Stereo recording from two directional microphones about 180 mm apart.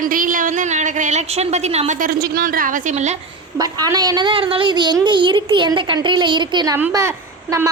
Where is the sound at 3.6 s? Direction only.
20° right (ahead or behind).